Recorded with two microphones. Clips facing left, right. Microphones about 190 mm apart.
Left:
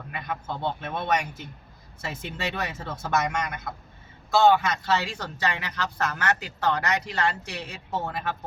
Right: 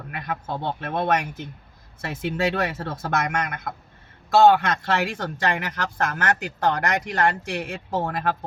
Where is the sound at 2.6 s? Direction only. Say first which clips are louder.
Right 5 dB; 60° right (ahead or behind).